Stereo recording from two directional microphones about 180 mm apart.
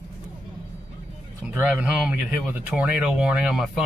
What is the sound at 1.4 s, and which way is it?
Speech, 5° right (ahead or behind).